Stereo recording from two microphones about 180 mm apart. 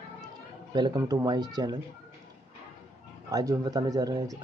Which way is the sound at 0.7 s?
25° right (ahead or behind).